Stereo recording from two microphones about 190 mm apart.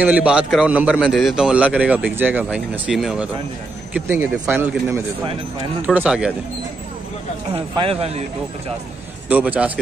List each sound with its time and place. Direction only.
0.0 s speech: 5° right (ahead or behind)
5.2 s speech: 25° right (ahead or behind)
5.9 s speech: 5° right (ahead or behind)
7.5 s speech: 25° right (ahead or behind)
9.3 s speech: 5° right (ahead or behind)